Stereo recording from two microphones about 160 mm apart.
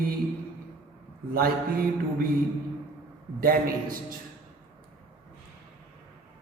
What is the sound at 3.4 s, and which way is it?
Speech, 65° right (ahead or behind).